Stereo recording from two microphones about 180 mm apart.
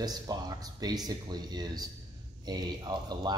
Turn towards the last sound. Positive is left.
turn(degrees=-25)  # may be behind; listen again after turning